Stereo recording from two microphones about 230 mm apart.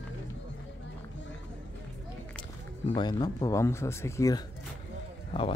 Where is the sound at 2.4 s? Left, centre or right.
Left.